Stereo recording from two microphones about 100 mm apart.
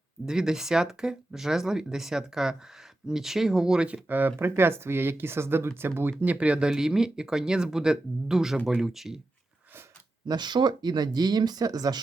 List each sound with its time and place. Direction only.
0.3 s speech: 5° right (ahead or behind)
10.2 s speech: 45° right (ahead or behind)